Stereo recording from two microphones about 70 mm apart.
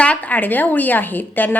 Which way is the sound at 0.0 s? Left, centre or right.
Centre.